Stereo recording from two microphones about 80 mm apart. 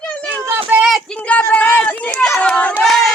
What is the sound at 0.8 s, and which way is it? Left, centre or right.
Child singing, centre.